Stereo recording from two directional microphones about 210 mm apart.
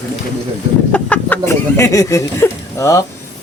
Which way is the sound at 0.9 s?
5° left (ahead or behind).